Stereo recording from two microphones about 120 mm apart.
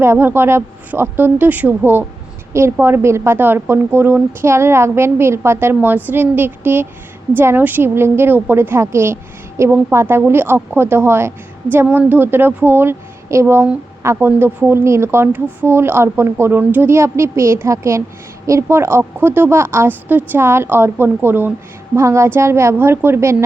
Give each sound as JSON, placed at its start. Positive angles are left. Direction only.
{"t": 0.0, "sound": "a woman's voice", "side_deg": -20}